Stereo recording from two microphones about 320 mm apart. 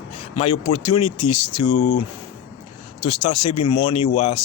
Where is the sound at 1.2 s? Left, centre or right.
Left.